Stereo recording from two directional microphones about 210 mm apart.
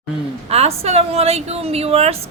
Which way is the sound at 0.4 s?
30° right (ahead or behind).